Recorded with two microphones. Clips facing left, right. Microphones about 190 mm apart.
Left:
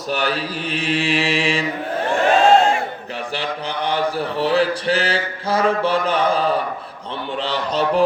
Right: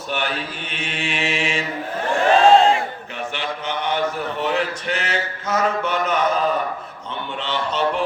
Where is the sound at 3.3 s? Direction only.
35° left (ahead or behind).